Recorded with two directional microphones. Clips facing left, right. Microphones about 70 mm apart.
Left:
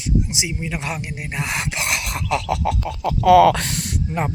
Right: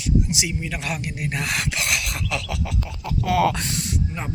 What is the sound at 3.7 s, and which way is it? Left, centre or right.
Speech, left.